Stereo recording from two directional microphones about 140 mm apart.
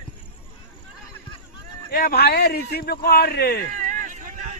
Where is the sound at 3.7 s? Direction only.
65° right (ahead or behind).